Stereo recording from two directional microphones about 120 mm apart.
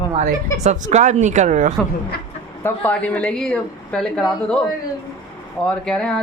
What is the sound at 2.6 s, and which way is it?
Speech, 15° left (ahead or behind).